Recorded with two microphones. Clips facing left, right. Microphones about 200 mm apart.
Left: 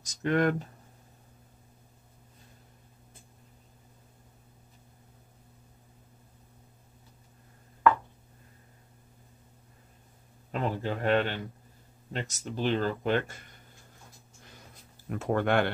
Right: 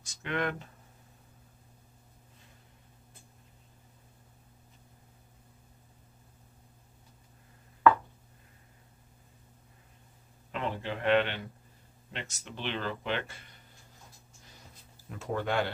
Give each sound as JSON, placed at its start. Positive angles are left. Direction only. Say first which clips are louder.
{"t": 0.0, "sound": "speech", "louder": "left 7 dB", "side_deg": 40}
{"t": 10.5, "sound": "speech", "louder": "left 4 dB", "side_deg": 40}
{"t": 15.0, "sound": "speech", "louder": "left 6 dB", "side_deg": 55}